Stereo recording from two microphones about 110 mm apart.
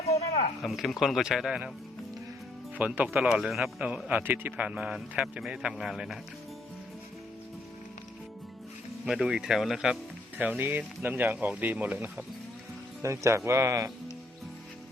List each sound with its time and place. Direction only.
0.6 s a man's voice: centre (ahead or behind)
2.7 s speech: 15° right (ahead or behind)
9.0 s speech: 5° right (ahead or behind); by 13.9 s 25° right (ahead or behind)